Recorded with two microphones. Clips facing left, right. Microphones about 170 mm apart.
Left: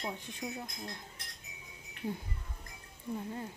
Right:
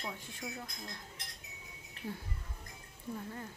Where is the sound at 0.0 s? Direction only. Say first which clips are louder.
Left 4 dB; 20° left (ahead or behind).